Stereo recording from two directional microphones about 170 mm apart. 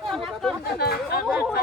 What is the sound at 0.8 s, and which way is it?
Speech, 70° left (ahead or behind).